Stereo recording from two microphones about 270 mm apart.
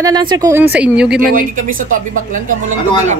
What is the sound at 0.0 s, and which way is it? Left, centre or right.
A woman's voice, centre.